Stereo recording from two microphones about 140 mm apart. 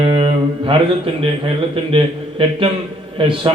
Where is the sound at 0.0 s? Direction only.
40° right (ahead or behind).